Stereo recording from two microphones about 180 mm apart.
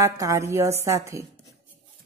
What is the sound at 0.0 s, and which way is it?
A woman's voice, 15° right (ahead or behind).